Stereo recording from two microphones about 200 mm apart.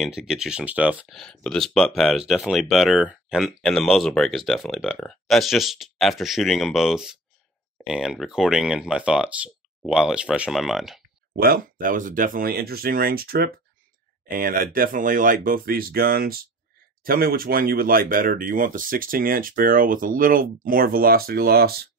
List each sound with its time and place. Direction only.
0.0 s speech: centre (ahead or behind)
11.3 s speech: 45° right (ahead or behind)